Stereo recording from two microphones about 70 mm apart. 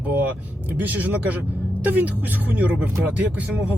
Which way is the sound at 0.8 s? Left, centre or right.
Right.